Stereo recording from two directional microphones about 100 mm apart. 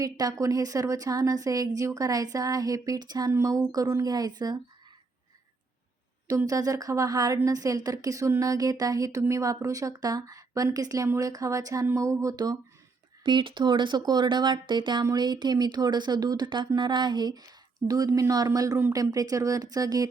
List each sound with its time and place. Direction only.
0.0 s a woman's voice: 40° right (ahead or behind)
6.2 s a woman's voice: 35° right (ahead or behind)
13.2 s a woman's voice: 55° right (ahead or behind); by 20.1 s 35° right (ahead or behind)